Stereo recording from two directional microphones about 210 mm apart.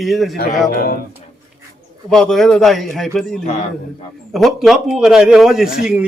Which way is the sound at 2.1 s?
Centre (ahead or behind).